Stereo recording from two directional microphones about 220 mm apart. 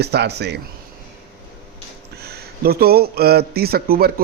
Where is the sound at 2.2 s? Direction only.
45° right (ahead or behind).